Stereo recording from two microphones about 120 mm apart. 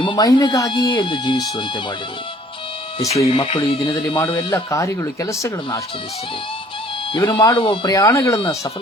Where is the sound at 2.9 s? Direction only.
60° left (ahead or behind).